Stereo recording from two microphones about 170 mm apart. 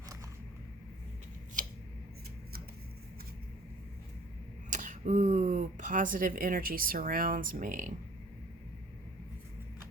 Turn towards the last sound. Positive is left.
turn(degrees=-50)  # may be behind; listen again after turning